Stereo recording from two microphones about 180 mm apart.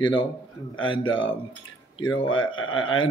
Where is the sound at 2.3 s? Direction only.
90° left.